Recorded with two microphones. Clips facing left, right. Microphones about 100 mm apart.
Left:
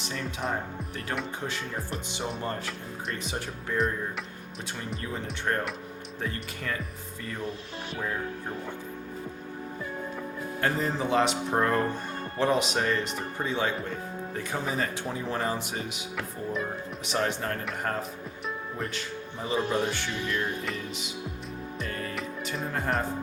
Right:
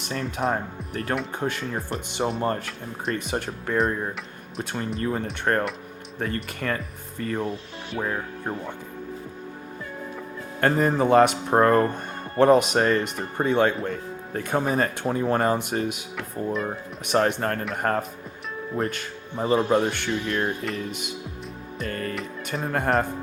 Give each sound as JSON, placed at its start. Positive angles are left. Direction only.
{"t": 0.0, "sound": "speech", "side_deg": -50}
{"t": 4.9, "sound": "speech", "side_deg": -55}
{"t": 10.6, "sound": "speech", "side_deg": -55}
{"t": 17.1, "sound": "speech", "side_deg": -55}
{"t": 21.8, "sound": "music", "side_deg": -55}
{"t": 22.7, "sound": "speech", "side_deg": -55}